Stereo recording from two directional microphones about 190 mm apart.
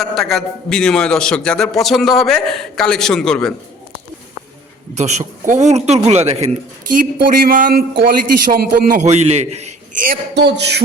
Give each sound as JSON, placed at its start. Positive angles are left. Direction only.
{"t": 0.0, "sound": "a man's voice", "side_deg": 0}
{"t": 4.9, "sound": "a man's voice", "side_deg": -35}
{"t": 10.3, "sound": "a man's voice", "side_deg": -65}